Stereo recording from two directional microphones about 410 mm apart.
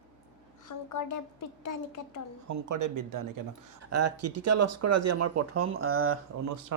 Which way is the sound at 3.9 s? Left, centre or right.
Right.